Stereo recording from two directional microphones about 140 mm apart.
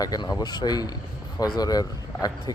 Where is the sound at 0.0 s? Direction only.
25° left (ahead or behind).